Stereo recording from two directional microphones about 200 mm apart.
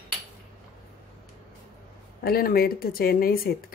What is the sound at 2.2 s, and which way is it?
Speech, 50° left (ahead or behind).